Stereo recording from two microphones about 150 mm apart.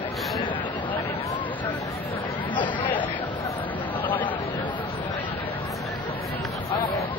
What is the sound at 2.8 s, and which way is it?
Chatter, 10° left (ahead or behind).